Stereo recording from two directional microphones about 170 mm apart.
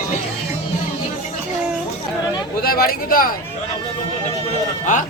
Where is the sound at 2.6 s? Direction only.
60° left (ahead or behind).